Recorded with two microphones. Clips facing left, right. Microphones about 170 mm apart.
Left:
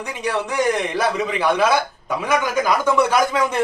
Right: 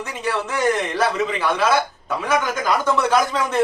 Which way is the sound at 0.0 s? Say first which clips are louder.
Left 1 dB; 15° left (ahead or behind).